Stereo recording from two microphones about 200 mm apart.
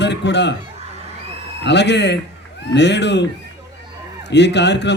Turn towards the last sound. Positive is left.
turn(degrees=60)  # may be behind; listen again after turning